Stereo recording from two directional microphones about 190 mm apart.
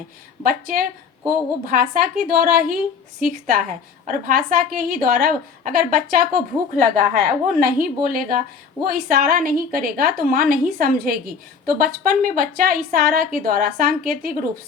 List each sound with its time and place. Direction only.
0.4 s a woman's voice: 50° right (ahead or behind)